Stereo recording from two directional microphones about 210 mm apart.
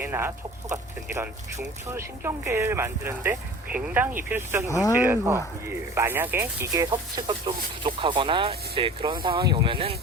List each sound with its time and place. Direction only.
0.0 s speech: 10° right (ahead or behind)
4.7 s speech: 15° left (ahead or behind)
4.9 s speech: 10° right (ahead or behind)
6.9 s speech: 20° right (ahead or behind)